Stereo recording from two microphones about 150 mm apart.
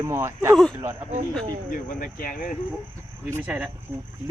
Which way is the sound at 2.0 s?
70° left (ahead or behind).